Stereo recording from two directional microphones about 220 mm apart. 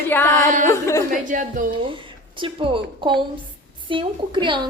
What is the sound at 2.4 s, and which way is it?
A woman's voice, 25° right (ahead or behind).